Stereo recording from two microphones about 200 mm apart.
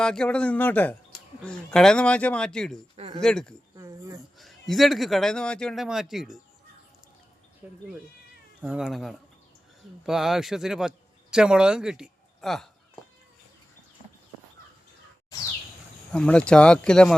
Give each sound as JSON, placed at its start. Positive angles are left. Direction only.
{"t": 0.0, "sound": "speech", "side_deg": 5}
{"t": 3.8, "sound": "a sound", "side_deg": -15}
{"t": 4.4, "sound": "speech", "side_deg": 0}
{"t": 7.6, "sound": "speech", "side_deg": -10}
{"t": 16.1, "sound": "speech", "side_deg": 5}